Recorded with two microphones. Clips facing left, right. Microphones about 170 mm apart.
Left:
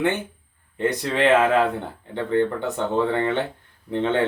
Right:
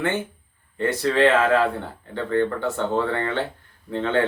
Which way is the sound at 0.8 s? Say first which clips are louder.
Right 2 dB; 20° left (ahead or behind).